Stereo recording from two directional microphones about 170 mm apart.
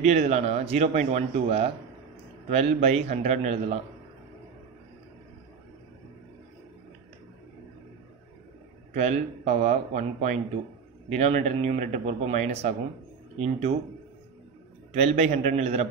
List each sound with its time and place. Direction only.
0.0 s speech: 40° right (ahead or behind)
8.9 s speech: 40° right (ahead or behind)
14.9 s speech: 35° right (ahead or behind)